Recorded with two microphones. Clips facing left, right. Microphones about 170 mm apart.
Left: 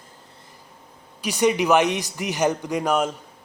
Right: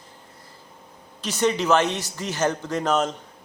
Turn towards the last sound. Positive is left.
turn(degrees=10)  # may be behind; listen again after turning